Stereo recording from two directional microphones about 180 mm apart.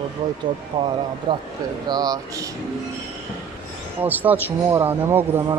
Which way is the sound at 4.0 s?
10° right (ahead or behind).